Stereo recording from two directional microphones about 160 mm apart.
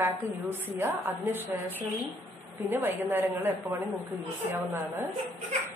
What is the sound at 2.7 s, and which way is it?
A woman's voice, 15° right (ahead or behind).